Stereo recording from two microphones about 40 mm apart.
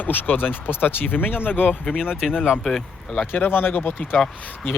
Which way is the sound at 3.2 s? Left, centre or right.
Left.